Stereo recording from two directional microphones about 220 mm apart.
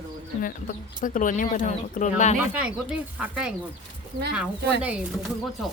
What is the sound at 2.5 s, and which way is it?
Speech, 5° right (ahead or behind).